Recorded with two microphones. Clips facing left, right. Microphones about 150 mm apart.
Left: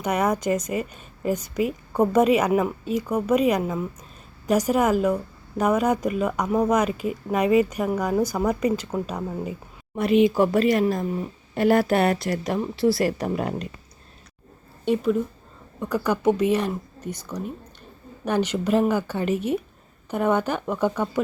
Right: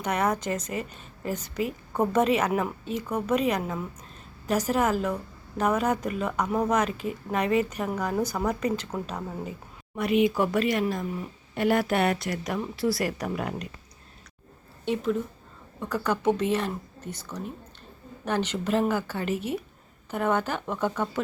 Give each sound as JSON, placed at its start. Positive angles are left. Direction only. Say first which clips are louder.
{"t": 0.0, "sound": "a woman's voice", "louder": "left 4 dB", "side_deg": 10}
{"t": 9.9, "sound": "a woman's voice", "louder": "left 5 dB", "side_deg": 30}
{"t": 14.8, "sound": "a woman's voice", "louder": "left 5 dB", "side_deg": 10}